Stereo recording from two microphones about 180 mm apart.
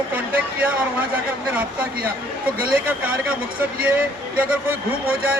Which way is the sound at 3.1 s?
10° right (ahead or behind).